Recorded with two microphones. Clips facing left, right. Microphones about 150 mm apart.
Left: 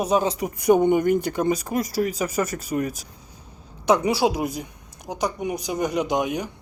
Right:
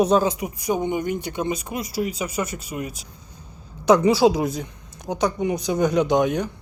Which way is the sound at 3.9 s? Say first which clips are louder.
Right 4 dB; 5° left (ahead or behind).